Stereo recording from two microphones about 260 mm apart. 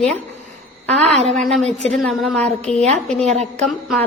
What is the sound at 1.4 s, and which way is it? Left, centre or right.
Speech, centre.